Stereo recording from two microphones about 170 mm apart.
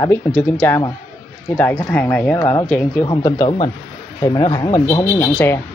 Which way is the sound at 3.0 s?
20° left (ahead or behind).